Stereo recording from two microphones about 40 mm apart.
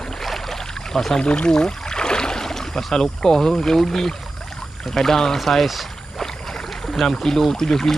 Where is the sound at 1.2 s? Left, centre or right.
Left; by 6.2 s centre.